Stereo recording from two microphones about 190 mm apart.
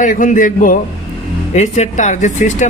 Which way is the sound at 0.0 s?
45° left (ahead or behind).